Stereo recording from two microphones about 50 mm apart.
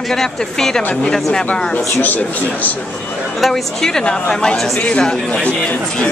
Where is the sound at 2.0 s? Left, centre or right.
Left.